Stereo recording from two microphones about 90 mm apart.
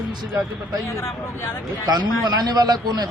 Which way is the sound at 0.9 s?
30° left (ahead or behind).